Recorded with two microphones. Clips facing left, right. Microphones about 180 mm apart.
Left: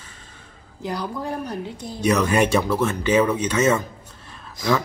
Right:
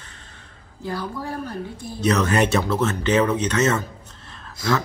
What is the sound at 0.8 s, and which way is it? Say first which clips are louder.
Speech: left 1 dB; 20° left (ahead or behind).